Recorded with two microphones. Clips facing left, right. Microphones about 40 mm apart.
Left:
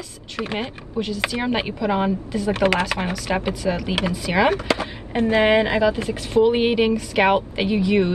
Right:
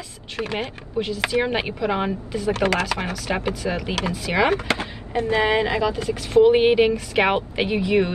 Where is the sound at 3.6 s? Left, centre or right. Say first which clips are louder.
Left 4 dB; centre.